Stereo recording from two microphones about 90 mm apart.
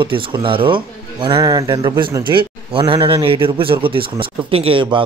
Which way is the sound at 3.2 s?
80° right.